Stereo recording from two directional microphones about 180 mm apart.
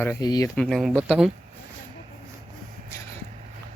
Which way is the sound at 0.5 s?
5° left (ahead or behind).